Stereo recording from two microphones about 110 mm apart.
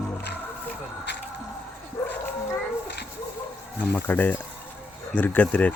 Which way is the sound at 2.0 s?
30° left (ahead or behind).